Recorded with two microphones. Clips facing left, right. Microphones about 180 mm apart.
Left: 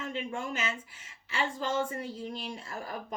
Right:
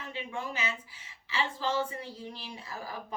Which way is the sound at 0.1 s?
45° left (ahead or behind).